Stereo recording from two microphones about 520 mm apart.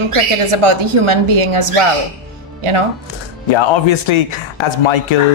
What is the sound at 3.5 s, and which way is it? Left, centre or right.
Speech, left.